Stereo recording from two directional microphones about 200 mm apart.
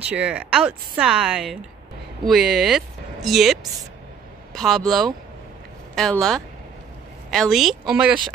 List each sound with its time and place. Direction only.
0.1 s speech: 5° right (ahead or behind)
4.6 s speech: centre (ahead or behind)